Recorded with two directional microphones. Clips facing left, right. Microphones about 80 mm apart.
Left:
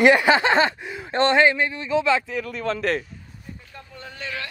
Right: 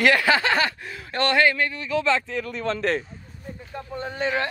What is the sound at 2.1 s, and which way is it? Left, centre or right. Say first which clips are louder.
Speech: left 1 dB; centre.